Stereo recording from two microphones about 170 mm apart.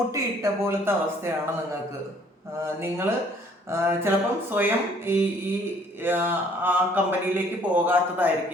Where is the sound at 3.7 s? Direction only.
15° right (ahead or behind).